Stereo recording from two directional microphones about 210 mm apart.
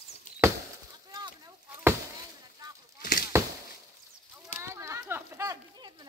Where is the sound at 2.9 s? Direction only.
45° left (ahead or behind).